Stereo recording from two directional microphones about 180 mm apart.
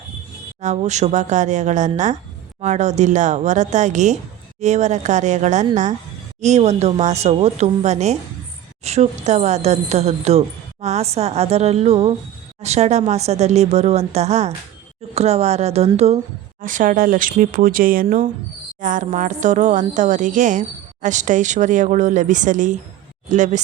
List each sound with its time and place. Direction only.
0.6 s speech: 40° right (ahead or behind)
16.6 s a woman's voice: 45° right (ahead or behind)